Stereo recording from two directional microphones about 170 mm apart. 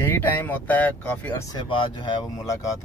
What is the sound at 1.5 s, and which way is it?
Speech, 30° left (ahead or behind).